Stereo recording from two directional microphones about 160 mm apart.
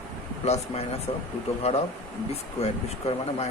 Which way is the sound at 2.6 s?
40° left (ahead or behind).